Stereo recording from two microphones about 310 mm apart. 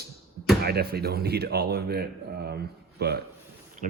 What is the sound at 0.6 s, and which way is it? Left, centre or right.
A man's voice, right.